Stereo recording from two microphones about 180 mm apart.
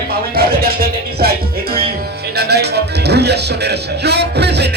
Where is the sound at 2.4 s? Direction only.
65° right (ahead or behind).